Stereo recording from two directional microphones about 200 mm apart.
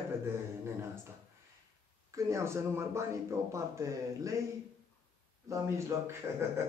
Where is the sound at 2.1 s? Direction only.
15° right (ahead or behind).